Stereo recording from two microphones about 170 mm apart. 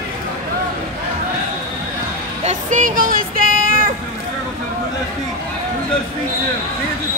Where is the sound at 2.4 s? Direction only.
50° right (ahead or behind).